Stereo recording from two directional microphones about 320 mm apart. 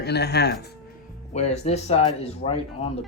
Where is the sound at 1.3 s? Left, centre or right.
Left.